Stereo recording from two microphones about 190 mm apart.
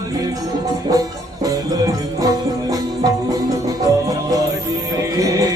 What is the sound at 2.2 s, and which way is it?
Music, 20° right (ahead or behind).